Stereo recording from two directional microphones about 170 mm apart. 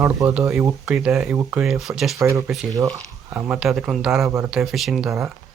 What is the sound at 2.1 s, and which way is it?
Speech, 20° right (ahead or behind).